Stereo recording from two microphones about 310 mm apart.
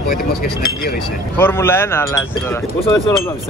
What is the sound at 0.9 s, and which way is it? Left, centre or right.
Speech, centre.